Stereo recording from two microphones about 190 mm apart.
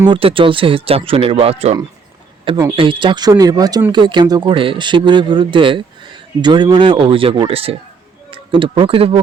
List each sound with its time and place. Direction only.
0.0 s speech: 25° right (ahead or behind)